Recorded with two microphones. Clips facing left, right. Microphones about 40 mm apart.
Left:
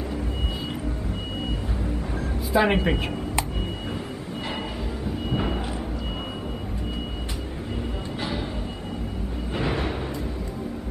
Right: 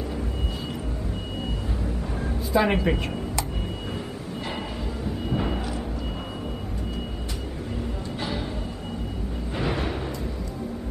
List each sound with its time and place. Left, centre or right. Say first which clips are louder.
2.5 s speech: left 1 dB; centre
5.3 s a sound: even; centre
9.6 s music: left 1 dB; centre